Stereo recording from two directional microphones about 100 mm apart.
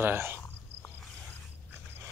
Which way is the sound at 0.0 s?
20° right (ahead or behind).